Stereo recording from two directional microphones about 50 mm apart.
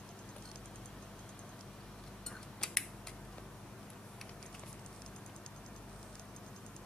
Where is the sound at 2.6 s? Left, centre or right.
Centre.